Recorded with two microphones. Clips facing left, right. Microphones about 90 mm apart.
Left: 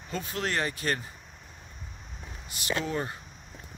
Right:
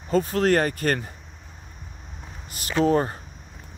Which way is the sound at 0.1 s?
40° right (ahead or behind).